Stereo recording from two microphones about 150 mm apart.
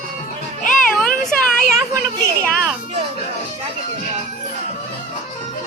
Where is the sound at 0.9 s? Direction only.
5° left (ahead or behind).